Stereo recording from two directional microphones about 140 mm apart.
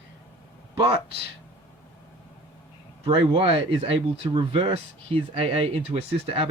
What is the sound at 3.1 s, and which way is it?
Speech, 35° right (ahead or behind).